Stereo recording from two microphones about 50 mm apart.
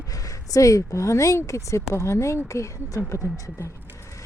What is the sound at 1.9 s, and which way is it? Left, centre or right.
Speech, left.